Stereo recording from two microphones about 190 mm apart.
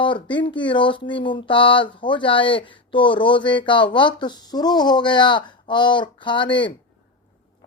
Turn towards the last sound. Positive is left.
turn(degrees=25)  # may be behind; listen again after turning